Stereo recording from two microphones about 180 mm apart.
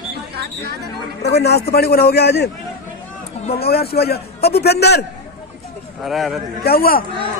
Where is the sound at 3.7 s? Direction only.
60° left (ahead or behind).